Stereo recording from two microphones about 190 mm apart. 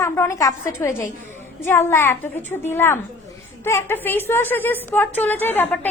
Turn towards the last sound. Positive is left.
turn(degrees=10)  # may be behind; listen again after turning